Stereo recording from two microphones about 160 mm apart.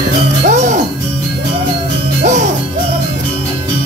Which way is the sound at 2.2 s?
50° right (ahead or behind).